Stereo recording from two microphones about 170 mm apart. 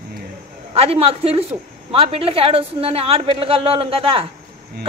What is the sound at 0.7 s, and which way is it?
A woman's voice, 35° right (ahead or behind).